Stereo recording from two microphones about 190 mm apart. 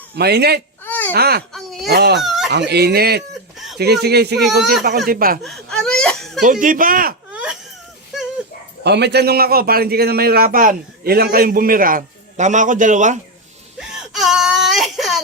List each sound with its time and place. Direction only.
0.2 s speech: 60° right (ahead or behind)
0.9 s a sound: 10° left (ahead or behind)
1.1 s speech: 55° right (ahead or behind)
1.5 s a sound: centre (ahead or behind)
1.9 s speech: 60° right (ahead or behind)
2.2 s fowl: centre (ahead or behind)
2.5 s a man's voice: 65° right (ahead or behind)
5.4 s whimper: centre (ahead or behind)
6.4 s a man's voice: 45° right (ahead or behind)
8.8 s a man's voice: 65° right (ahead or behind); by 13.1 s 40° right (ahead or behind)
13.7 s whimper: 5° right (ahead or behind)